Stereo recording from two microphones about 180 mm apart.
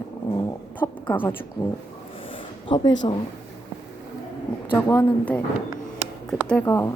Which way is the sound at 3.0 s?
30° left (ahead or behind).